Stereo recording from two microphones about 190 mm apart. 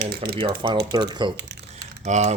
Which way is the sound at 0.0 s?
55° right (ahead or behind).